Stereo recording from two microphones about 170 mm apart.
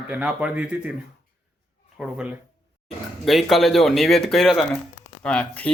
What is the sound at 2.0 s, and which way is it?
Speech, 5° right (ahead or behind).